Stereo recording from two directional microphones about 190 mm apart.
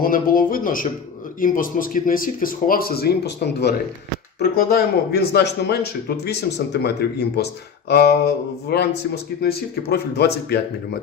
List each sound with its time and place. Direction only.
0.0 s speech: 50° left (ahead or behind)